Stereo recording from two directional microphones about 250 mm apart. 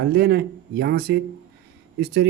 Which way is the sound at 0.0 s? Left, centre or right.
Right.